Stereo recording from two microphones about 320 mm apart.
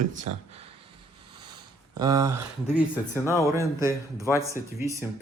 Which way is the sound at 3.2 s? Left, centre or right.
Centre.